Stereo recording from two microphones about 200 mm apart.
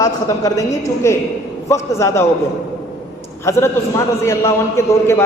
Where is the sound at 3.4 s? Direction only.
15° left (ahead or behind).